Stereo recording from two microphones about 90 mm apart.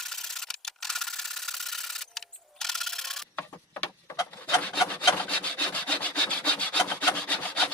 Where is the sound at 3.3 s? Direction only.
20° left (ahead or behind).